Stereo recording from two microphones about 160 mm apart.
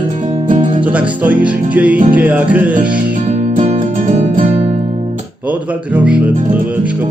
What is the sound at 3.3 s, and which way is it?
Music, 45° right (ahead or behind).